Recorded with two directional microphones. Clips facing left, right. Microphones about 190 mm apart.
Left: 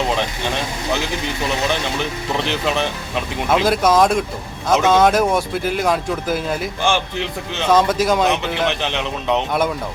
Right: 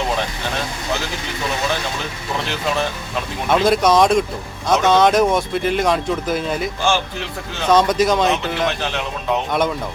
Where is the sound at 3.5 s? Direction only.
5° left (ahead or behind).